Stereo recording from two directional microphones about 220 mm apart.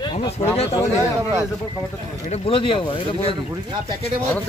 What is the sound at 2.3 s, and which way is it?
Speech, 25° left (ahead or behind).